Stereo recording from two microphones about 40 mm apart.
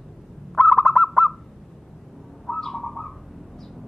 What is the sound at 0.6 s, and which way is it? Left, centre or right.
Owl, centre.